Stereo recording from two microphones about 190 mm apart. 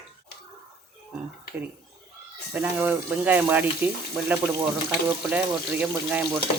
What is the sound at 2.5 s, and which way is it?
Speech, 10° right (ahead or behind).